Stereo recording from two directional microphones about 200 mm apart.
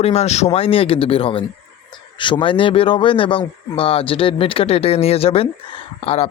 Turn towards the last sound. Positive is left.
turn(degrees=30)  # may be behind; listen again after turning